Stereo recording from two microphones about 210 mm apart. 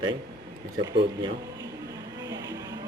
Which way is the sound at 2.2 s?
15° right (ahead or behind).